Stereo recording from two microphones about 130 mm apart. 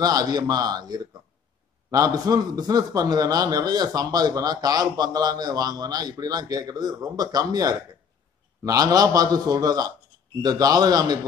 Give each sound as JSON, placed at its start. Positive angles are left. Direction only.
{"t": 0.0, "sound": "a man's voice", "side_deg": -30}